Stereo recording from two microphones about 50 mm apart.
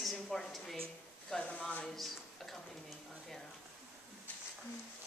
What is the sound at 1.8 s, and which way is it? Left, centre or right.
Drawer open or close, centre.